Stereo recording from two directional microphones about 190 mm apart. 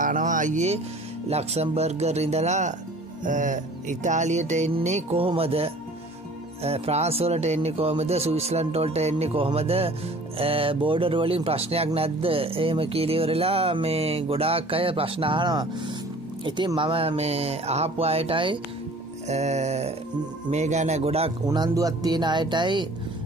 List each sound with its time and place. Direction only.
0.0 s music: 45° right (ahead or behind)
1.3 s speech: 35° right (ahead or behind)
21.5 s speech: 20° right (ahead or behind)